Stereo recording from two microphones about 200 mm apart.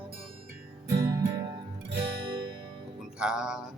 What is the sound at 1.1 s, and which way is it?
Music, 20° right (ahead or behind).